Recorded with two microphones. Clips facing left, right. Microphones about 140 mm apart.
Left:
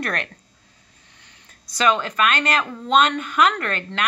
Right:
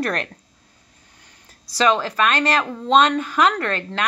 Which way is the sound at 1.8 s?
35° right (ahead or behind).